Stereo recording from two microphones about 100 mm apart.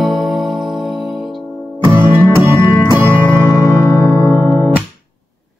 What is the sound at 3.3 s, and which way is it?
Music, centre (ahead or behind).